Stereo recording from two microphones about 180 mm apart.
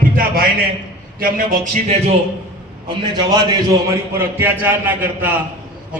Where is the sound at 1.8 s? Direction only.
35° right (ahead or behind).